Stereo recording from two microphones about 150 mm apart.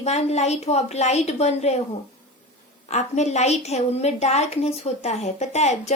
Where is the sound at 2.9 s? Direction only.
50° left (ahead or behind).